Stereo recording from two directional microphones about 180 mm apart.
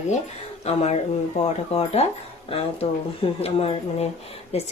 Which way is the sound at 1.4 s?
35° left (ahead or behind).